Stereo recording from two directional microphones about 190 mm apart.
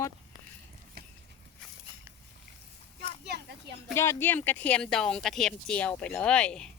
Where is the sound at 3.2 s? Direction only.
60° right (ahead or behind).